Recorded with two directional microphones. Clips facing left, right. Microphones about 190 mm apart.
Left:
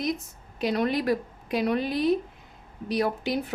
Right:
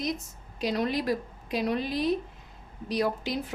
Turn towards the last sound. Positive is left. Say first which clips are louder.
# left 2 dB
turn(degrees=60)  # may be behind; listen again after turning